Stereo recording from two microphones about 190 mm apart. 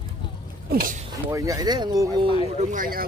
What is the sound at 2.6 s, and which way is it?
Speech, 45° right (ahead or behind).